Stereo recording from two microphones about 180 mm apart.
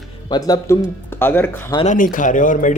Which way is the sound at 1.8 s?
45° left (ahead or behind).